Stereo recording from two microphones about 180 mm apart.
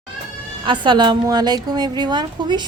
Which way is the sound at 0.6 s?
25° right (ahead or behind).